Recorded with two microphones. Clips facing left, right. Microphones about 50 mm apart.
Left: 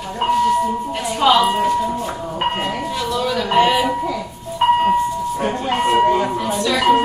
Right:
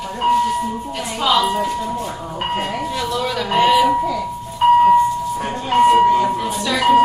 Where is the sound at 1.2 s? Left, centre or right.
Centre.